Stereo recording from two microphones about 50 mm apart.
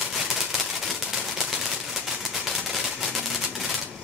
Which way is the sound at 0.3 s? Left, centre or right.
Centre.